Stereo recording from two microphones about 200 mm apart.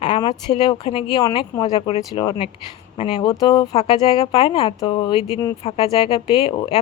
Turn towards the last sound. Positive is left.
turn(degrees=30)  # may be behind; listen again after turning